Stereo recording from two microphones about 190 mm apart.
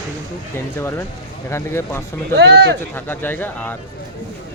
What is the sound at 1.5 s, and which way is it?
Speech, 15° left (ahead or behind).